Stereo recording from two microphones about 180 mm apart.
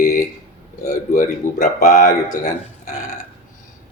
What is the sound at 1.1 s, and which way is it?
Speech, 50° left (ahead or behind).